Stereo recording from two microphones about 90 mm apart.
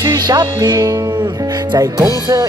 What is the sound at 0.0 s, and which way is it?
Speech, 45° right (ahead or behind).